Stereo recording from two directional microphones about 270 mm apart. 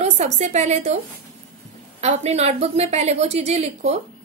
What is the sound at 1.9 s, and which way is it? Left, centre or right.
A woman's voice, right.